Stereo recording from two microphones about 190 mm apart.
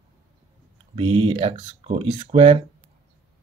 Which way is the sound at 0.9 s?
30° right (ahead or behind).